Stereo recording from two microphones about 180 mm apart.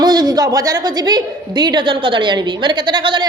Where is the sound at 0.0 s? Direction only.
20° right (ahead or behind).